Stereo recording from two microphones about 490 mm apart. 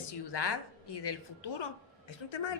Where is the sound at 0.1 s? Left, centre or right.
Left.